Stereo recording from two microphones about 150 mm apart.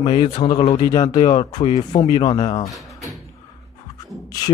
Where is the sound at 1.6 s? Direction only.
40° left (ahead or behind).